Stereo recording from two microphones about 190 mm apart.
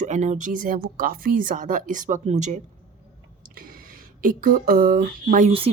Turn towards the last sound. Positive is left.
turn(degrees=-45)  # may be behind; listen again after turning